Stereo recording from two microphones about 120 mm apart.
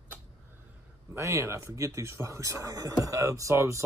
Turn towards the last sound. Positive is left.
turn(degrees=-25)  # may be behind; listen again after turning